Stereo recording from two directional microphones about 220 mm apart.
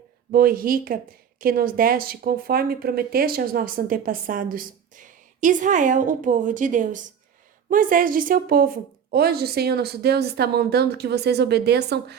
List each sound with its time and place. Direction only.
0.3 s a woman's voice: 40° right (ahead or behind)